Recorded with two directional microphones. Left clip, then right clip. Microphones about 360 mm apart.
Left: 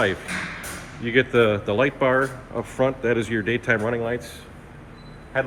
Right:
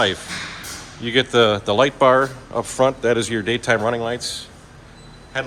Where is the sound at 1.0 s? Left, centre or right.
Centre.